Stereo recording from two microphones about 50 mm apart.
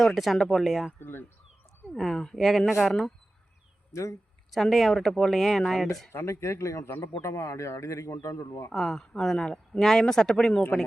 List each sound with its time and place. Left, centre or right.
0.0 s speech: centre
0.9 s speech: left
1.9 s speech: centre
3.9 s speech: left
4.5 s speech: centre
6.1 s speech: left
7.0 s speech: left
8.7 s speech: centre